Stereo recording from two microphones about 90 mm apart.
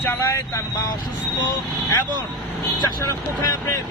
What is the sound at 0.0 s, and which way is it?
Speech, 30° left (ahead or behind).